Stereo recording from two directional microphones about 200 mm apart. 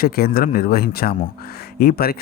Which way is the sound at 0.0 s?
50° left (ahead or behind).